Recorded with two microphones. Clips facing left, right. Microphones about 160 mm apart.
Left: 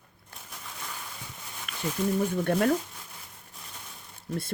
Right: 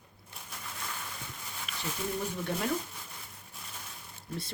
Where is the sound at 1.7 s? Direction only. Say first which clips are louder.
Left 2 dB; 55° left (ahead or behind).